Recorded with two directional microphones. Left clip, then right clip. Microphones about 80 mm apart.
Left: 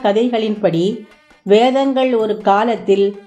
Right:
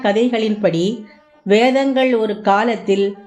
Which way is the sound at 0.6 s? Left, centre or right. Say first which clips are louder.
Left 1 dB; centre.